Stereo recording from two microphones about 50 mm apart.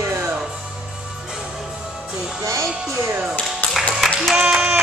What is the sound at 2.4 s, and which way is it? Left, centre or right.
Music, right.